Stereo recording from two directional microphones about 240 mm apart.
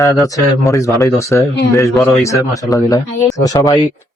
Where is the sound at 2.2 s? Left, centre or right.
Centre.